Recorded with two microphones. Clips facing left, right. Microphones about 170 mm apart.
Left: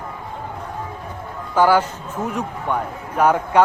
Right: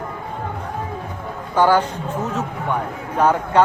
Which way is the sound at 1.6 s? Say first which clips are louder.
Even; 10° left (ahead or behind).